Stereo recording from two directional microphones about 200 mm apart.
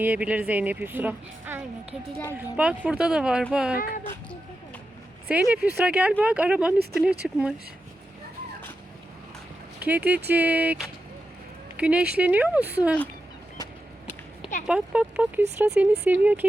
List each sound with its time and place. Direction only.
0.0 s a woman's voice: 5° right (ahead or behind)
3.8 s a child's voice: 45° left (ahead or behind)
5.3 s a woman's voice: 5° right (ahead or behind)
9.8 s a woman's voice: 5° right (ahead or behind)
14.7 s a woman's voice: 5° right (ahead or behind)